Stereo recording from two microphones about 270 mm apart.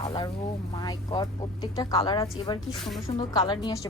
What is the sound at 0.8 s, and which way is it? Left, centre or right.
A woman's voice, centre.